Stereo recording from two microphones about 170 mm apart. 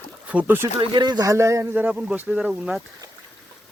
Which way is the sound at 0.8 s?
25° right (ahead or behind).